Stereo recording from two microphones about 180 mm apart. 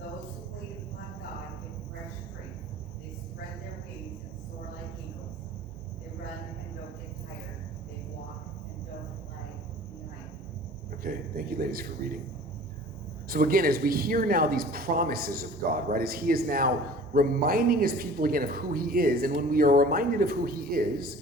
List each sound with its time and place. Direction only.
11.0 s a man's voice: 55° right (ahead or behind)
13.2 s speech: 55° right (ahead or behind)